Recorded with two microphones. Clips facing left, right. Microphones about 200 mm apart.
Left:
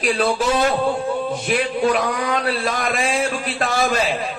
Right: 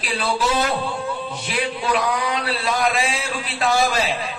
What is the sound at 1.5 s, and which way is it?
Speech, 50° left (ahead or behind).